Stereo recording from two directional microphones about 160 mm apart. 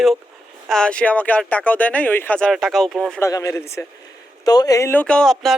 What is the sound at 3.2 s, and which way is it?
Speech, 20° left (ahead or behind).